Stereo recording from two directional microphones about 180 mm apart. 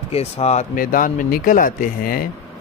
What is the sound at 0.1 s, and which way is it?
Speech, 35° left (ahead or behind).